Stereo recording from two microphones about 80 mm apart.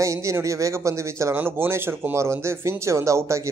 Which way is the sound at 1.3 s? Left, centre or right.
Right.